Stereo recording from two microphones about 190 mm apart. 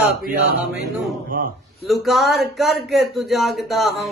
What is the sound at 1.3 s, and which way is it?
Speech, 50° right (ahead or behind).